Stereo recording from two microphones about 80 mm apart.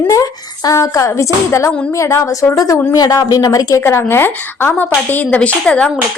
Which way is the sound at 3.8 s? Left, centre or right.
Left.